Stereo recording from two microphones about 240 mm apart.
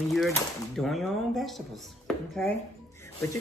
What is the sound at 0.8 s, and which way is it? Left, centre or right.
Speech, centre.